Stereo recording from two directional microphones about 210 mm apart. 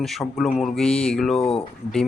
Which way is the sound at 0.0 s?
Centre (ahead or behind).